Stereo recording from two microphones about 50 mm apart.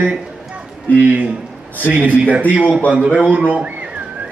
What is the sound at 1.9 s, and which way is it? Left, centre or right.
Speech, right.